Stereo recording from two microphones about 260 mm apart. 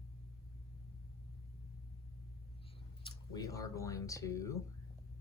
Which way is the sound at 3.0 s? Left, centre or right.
Centre.